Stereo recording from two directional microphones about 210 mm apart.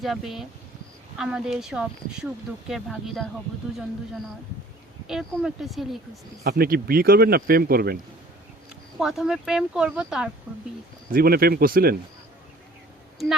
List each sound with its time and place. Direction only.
0.0 s speech: centre (ahead or behind)
5.0 s speech: centre (ahead or behind)
6.4 s speech: 50° right (ahead or behind)
9.0 s speech: centre (ahead or behind)
11.1 s speech: 45° right (ahead or behind)